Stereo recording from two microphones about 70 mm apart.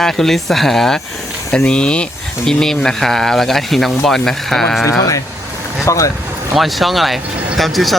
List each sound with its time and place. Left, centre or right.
0.0 s speech: centre
4.9 s speech: left
6.6 s speech: centre